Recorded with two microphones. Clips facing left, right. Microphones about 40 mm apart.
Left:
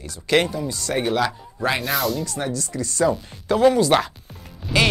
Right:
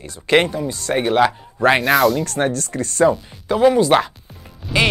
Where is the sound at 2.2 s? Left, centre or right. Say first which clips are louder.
Right 6 dB; right.